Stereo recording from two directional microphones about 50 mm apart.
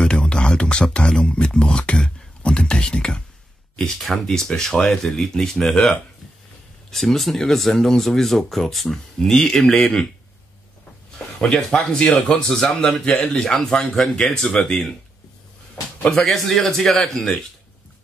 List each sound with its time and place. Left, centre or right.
0.0 s speech: centre
3.7 s speech: centre
11.3 s speech: centre
16.1 s speech: centre